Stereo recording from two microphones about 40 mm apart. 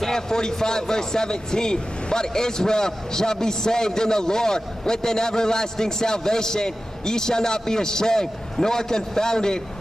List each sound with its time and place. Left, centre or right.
0.0 s speech: centre